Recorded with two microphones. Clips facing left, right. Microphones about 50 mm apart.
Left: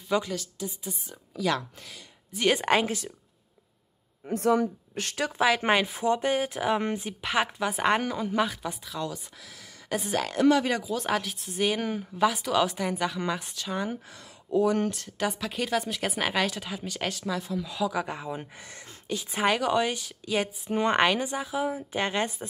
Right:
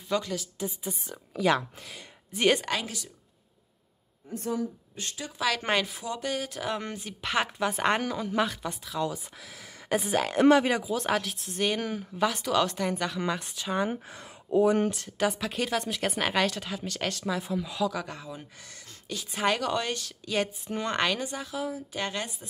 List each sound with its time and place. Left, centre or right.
0.1 s a woman's voice: centre
0.6 s speech: right
2.6 s a woman's voice: left
4.3 s a woman's voice: left
5.4 s a woman's voice: centre
5.9 s a woman's voice: left
7.1 s a woman's voice: centre
9.0 s speech: centre
13.6 s speech: centre
14.9 s speech: centre
17.3 s speech: centre
17.8 s a woman's voice: centre
19.4 s a woman's voice: centre